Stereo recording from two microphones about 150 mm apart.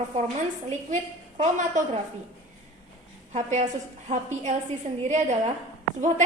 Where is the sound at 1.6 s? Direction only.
55° right (ahead or behind).